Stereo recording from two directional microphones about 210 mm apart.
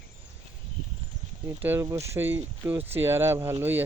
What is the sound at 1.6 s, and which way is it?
Speech, 10° right (ahead or behind).